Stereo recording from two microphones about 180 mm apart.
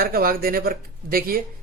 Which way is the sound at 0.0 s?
55° right (ahead or behind).